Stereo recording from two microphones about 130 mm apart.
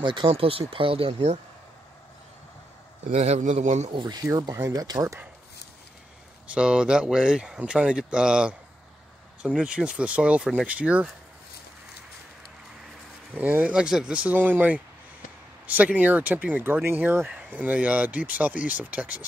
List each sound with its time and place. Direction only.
0.0 s speech: 40° right (ahead or behind)
3.1 s speech: 55° right (ahead or behind)
3.9 s speech: 35° right (ahead or behind)
6.4 s speech: 10° right (ahead or behind)
9.6 s speech: 5° right (ahead or behind)
13.3 s speech: 15° right (ahead or behind)